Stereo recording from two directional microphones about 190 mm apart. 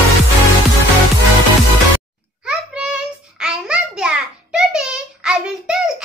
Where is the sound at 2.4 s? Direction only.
5° right (ahead or behind).